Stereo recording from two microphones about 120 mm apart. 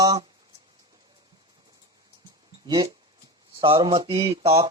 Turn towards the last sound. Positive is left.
turn(degrees=-50)  # may be behind; listen again after turning